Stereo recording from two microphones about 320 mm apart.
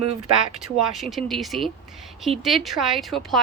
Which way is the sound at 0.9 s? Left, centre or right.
Centre.